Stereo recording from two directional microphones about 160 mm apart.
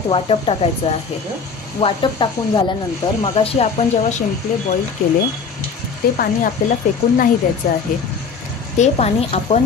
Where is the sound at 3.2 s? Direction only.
40° left (ahead or behind).